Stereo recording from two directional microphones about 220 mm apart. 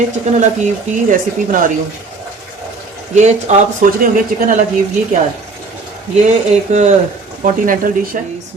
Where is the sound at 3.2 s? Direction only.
30° right (ahead or behind).